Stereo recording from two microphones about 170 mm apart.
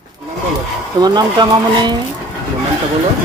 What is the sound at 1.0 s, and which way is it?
Speech, 25° right (ahead or behind).